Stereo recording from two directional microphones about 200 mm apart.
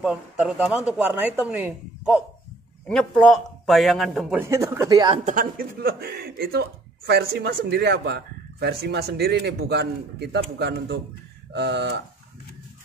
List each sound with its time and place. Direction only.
0.0 s speech: 5° right (ahead or behind)
2.9 s a man's voice: 5° left (ahead or behind)
4.4 s speech: 15° right (ahead or behind)
5.2 s speech: 45° right (ahead or behind)